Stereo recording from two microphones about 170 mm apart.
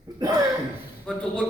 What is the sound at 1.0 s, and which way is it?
Speech, 5° left (ahead or behind).